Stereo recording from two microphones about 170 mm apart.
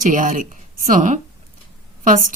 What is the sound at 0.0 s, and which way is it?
Speech, 50° right (ahead or behind).